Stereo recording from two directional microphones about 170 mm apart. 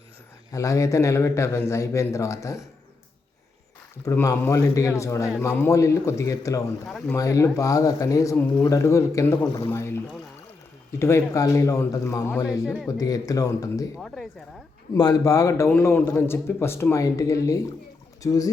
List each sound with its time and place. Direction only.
0.5 s a man's voice: 20° left (ahead or behind)
4.0 s a man's voice: 20° left (ahead or behind)
6.8 s speech: centre (ahead or behind)
7.2 s a man's voice: 20° left (ahead or behind)
11.0 s a man's voice: 15° left (ahead or behind)
13.9 s speech: centre (ahead or behind)
14.9 s a man's voice: 20° left (ahead or behind)